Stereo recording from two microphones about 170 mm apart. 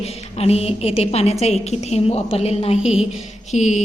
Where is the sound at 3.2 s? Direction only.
40° left (ahead or behind).